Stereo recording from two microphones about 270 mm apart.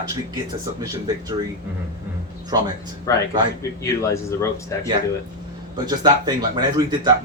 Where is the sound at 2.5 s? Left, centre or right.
Centre.